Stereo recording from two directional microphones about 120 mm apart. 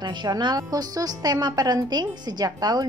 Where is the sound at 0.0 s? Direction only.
35° right (ahead or behind).